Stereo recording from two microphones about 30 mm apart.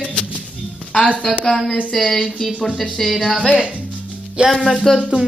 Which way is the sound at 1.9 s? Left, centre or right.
Centre.